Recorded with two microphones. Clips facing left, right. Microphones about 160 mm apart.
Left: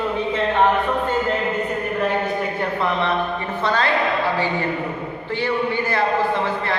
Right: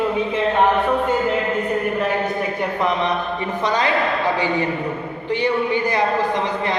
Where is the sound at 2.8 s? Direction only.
15° right (ahead or behind).